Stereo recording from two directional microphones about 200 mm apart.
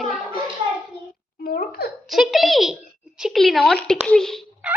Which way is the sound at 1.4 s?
50° left (ahead or behind).